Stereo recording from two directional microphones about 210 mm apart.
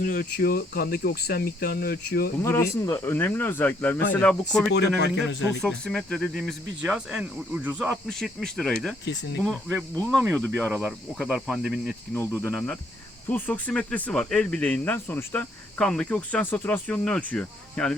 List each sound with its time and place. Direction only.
0.0 s cricket: 45° left (ahead or behind)
2.4 s speech: 15° left (ahead or behind)
4.7 s a man's voice: 55° left (ahead or behind)
5.6 s speech: 5° left (ahead or behind)
12.1 s speech: 10° left (ahead or behind)